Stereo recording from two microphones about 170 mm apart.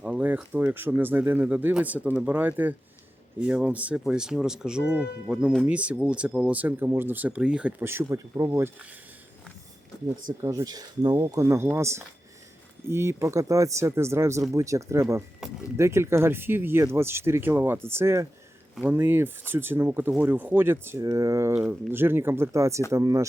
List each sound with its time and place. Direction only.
0.0 s speech: 10° right (ahead or behind)
10.4 s speech: 20° right (ahead or behind)